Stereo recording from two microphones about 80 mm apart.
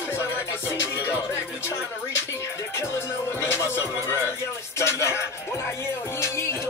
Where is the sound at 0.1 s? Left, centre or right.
Left.